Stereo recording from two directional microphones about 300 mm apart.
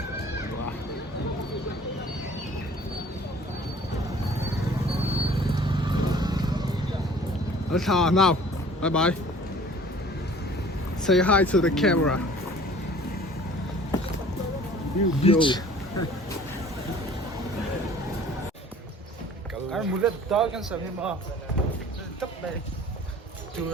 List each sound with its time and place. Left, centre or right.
5.0 s vehicle: centre
7.8 s speech: centre
11.0 s speech: centre
15.2 s speech: centre
19.7 s speech: centre